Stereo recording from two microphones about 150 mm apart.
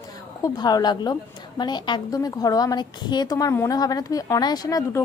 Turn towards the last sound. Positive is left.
turn(degrees=25)  # may be behind; listen again after turning